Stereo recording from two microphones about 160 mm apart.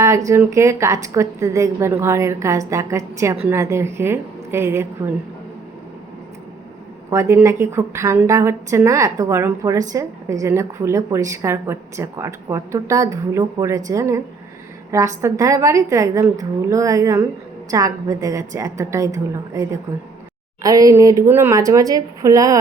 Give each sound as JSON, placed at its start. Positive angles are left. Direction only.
{"t": 0.0, "sound": "a woman's voice", "side_deg": -20}
{"t": 7.1, "sound": "a woman's voice", "side_deg": -15}